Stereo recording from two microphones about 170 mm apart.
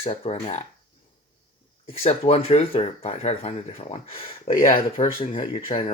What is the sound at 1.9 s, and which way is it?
Speech, 35° left (ahead or behind).